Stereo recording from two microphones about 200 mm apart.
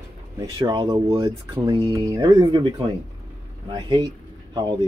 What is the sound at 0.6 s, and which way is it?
Speech, 20° right (ahead or behind).